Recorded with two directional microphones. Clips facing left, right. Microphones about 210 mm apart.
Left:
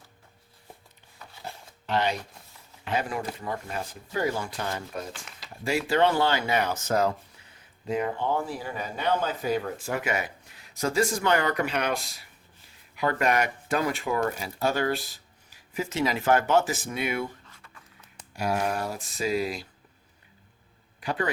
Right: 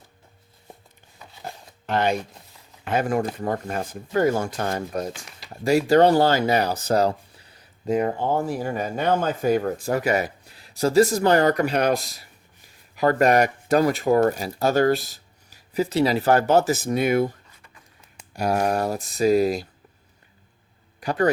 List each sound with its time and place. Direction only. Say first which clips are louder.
1.9 s speech: right 4 dB; 50° right (ahead or behind)
18.3 s speech: right 5 dB; 40° right (ahead or behind)
21.0 s speech: right 6 dB; 40° right (ahead or behind)